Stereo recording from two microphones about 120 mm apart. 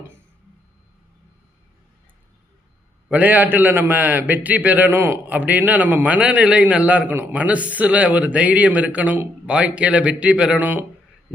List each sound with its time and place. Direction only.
3.1 s a man's voice: 15° right (ahead or behind)